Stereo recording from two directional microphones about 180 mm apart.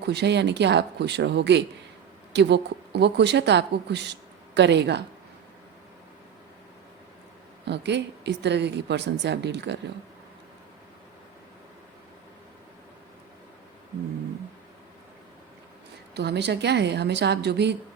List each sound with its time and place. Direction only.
0.0 s speech: 70° right (ahead or behind)
7.6 s speech: 70° right (ahead or behind)
16.1 s speech: 70° right (ahead or behind)